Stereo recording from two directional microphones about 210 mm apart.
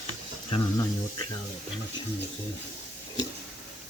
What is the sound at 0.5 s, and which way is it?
Speech, 20° left (ahead or behind).